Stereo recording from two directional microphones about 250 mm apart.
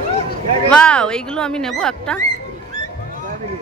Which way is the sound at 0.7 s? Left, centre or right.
Centre.